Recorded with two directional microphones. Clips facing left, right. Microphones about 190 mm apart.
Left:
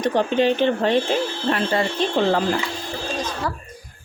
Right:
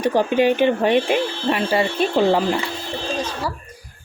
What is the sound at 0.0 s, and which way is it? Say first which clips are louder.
Speech: right 2 dB; 10° right (ahead or behind).